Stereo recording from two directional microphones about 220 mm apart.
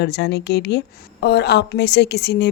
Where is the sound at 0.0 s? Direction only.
50° left (ahead or behind).